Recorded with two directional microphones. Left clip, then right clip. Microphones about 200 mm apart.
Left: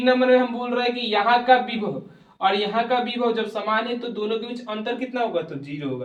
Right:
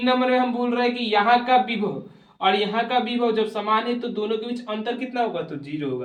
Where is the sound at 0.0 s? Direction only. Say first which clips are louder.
Left 3 dB; 15° left (ahead or behind).